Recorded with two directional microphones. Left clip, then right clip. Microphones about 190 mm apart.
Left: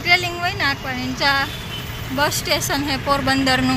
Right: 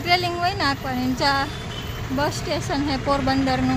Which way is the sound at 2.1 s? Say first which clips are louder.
Left 5 dB; 10° right (ahead or behind).